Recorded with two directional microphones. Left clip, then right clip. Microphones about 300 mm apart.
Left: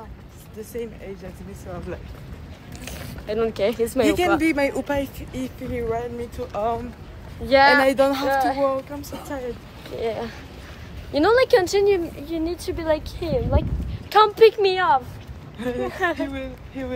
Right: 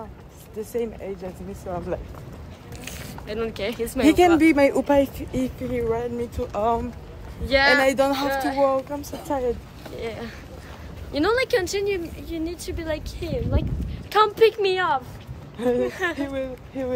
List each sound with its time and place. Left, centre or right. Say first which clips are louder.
0.6 s speech: right 4 dB; right
2.8 s speech: even; centre
4.4 s speech: right 4 dB; right
7.4 s speech: left 3 dB; centre
7.8 s a woman's voice: left 1 dB; centre
8.4 s speech: left 2 dB; centre
8.6 s a woman's voice: right 1 dB; centre
9.9 s a woman's voice: left 6 dB; centre
13.6 s speech: left 4 dB; centre
15.5 s speech: right 6 dB; right
15.9 s speech: left 3 dB; centre
16.2 s speech: right 1 dB; right